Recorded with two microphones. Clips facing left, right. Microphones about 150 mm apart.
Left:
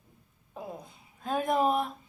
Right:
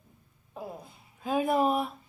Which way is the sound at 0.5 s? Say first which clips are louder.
Even; 5° right (ahead or behind).